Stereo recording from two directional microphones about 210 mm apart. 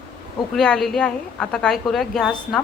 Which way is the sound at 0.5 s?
Centre (ahead or behind).